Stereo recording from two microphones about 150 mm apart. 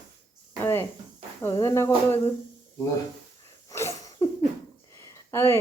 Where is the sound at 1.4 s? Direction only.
20° left (ahead or behind).